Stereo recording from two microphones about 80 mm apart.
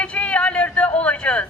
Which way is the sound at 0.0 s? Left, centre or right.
Centre.